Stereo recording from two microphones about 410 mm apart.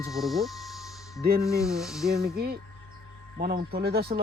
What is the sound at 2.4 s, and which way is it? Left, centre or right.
Speech, right.